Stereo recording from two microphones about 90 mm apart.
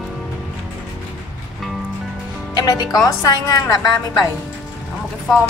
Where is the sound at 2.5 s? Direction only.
45° left (ahead or behind).